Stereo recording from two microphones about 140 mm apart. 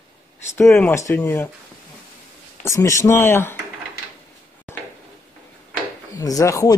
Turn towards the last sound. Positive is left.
turn(degrees=25)  # may be behind; listen again after turning